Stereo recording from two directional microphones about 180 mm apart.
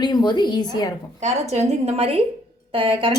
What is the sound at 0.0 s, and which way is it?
Speech, 25° left (ahead or behind).